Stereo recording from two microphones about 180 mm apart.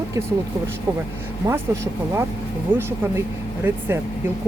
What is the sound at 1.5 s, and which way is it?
Speech, 15° right (ahead or behind).